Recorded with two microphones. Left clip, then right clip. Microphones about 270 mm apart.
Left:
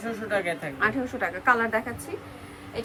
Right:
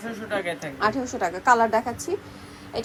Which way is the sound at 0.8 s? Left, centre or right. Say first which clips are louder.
Right 2 dB; centre.